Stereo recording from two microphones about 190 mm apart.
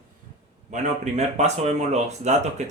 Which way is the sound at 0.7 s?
35° right (ahead or behind).